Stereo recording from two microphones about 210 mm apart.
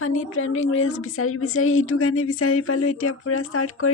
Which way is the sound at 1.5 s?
75° left (ahead or behind).